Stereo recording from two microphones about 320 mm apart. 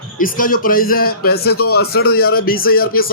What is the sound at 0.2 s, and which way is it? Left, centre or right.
A man's voice, left.